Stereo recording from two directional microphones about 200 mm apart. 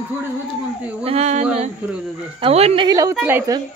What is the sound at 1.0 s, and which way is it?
A woman's voice, 30° right (ahead or behind).